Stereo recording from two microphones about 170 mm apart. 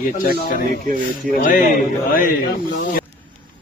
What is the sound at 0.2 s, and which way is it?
A man's voice, 60° left (ahead or behind).